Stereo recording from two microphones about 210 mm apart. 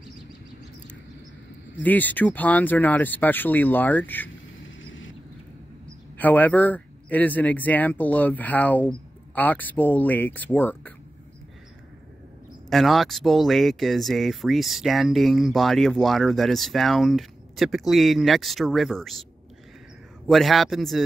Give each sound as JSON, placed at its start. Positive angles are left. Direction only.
{"t": 1.8, "sound": "speech", "side_deg": 10}
{"t": 4.6, "sound": "a sound", "side_deg": 65}
{"t": 6.1, "sound": "speech", "side_deg": 10}
{"t": 12.6, "sound": "speech", "side_deg": 0}
{"t": 20.2, "sound": "speech", "side_deg": 0}